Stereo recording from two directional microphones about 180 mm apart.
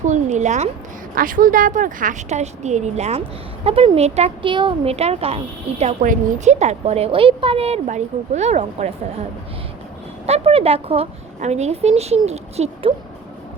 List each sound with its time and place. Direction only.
0.0 s a woman's voice: 40° right (ahead or behind)
1.1 s a woman's voice: 50° right (ahead or behind)
10.2 s a woman's voice: 35° right (ahead or behind)